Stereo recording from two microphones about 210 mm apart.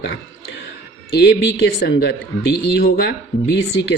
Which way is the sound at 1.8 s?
55° left (ahead or behind).